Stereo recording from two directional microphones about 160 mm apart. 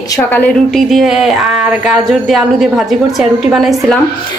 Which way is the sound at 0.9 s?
Centre (ahead or behind).